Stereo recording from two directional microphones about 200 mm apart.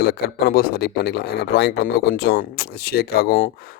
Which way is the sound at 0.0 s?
50° left (ahead or behind).